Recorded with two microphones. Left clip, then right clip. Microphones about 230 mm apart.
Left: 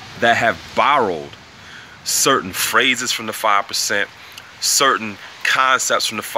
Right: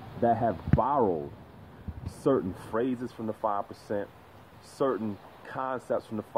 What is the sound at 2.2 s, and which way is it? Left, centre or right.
Speech, left.